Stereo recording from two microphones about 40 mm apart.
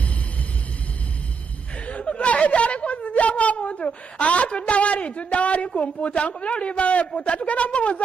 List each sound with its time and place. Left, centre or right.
1.9 s a woman's voice: left